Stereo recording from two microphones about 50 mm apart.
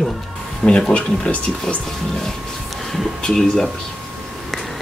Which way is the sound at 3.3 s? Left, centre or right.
Centre.